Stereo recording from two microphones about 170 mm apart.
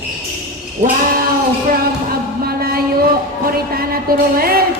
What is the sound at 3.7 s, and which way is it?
Music, 60° right (ahead or behind).